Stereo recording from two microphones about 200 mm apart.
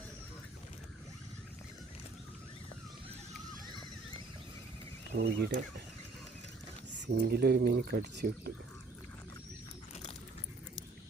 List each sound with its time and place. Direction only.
5.1 s speech: 55° right (ahead or behind)
7.1 s speech: 55° right (ahead or behind)